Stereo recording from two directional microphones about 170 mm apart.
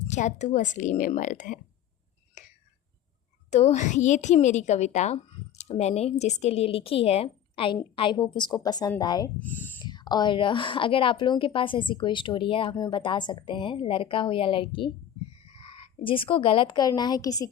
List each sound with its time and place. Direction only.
0.1 s a woman's voice: 45° left (ahead or behind)
2.4 s whispering: 45° left (ahead or behind)
3.5 s a woman's voice: 40° left (ahead or behind); by 9.3 s 25° left (ahead or behind)
9.4 s speech: 10° left (ahead or behind)
9.7 s a woman's voice: 25° left (ahead or behind)